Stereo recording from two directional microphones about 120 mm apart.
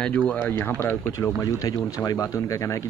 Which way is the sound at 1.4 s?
30° left (ahead or behind).